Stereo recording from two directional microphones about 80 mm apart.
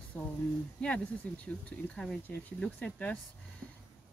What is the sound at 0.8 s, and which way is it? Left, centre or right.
Speech, centre.